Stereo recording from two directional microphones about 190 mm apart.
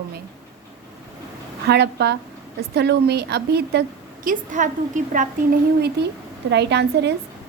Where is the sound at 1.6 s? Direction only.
60° right (ahead or behind); by 5.3 s 40° right (ahead or behind).